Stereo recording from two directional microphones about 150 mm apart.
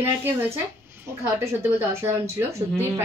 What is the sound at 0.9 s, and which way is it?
A woman's voice, 15° right (ahead or behind).